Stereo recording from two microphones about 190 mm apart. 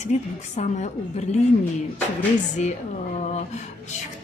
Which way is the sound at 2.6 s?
40° left (ahead or behind).